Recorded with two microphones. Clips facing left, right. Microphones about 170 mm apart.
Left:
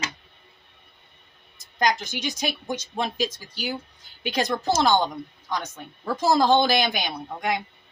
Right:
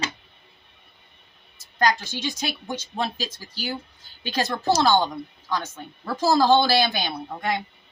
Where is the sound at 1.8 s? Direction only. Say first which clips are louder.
Right 1 dB; 15° left (ahead or behind).